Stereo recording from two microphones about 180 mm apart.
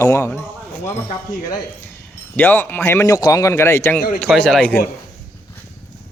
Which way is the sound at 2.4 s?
10° left (ahead or behind).